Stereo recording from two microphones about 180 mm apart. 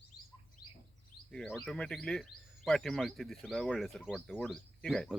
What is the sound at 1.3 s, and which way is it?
Speech, centre (ahead or behind).